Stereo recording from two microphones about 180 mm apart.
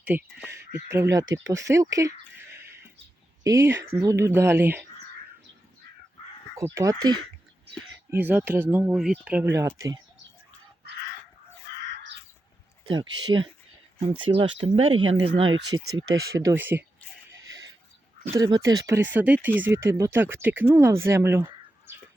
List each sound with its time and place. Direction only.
0.0 s speech: 10° right (ahead or behind)
3.4 s speech: 15° right (ahead or behind)
6.7 s speech: 20° right (ahead or behind)
8.1 s speech: 10° right (ahead or behind)
12.8 s speech: 25° right (ahead or behind)
18.3 s speech: 20° right (ahead or behind)